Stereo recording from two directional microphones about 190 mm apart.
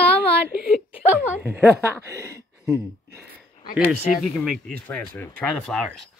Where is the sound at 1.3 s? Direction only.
15° right (ahead or behind).